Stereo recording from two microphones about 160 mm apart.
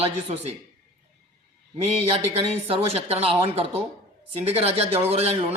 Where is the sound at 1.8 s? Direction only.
40° right (ahead or behind).